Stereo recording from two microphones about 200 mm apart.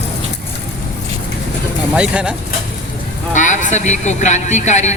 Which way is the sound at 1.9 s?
5° right (ahead or behind).